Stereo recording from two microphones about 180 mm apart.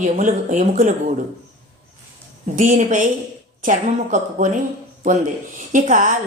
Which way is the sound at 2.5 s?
45° right (ahead or behind).